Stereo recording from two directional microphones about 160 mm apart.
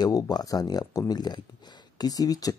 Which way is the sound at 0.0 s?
25° left (ahead or behind).